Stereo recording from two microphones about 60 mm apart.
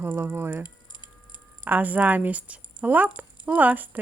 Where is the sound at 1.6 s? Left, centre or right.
Right.